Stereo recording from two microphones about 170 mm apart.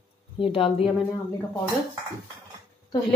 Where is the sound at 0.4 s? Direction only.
30° left (ahead or behind).